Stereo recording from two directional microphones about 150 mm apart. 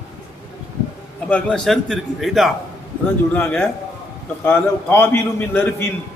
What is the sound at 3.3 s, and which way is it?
A man's voice, 15° left (ahead or behind).